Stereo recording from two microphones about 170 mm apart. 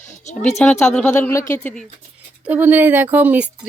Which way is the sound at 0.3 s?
40° left (ahead or behind).